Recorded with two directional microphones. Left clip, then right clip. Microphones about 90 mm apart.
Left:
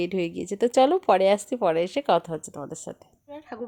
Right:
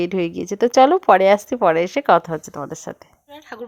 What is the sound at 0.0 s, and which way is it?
A woman's voice, 35° right (ahead or behind).